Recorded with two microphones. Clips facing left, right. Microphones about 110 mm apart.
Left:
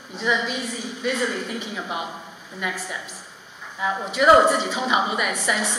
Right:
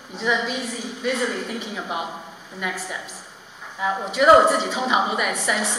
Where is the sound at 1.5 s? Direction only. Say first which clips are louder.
Right 1 dB; 5° right (ahead or behind).